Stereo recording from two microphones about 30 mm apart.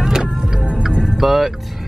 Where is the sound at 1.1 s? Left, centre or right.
Centre.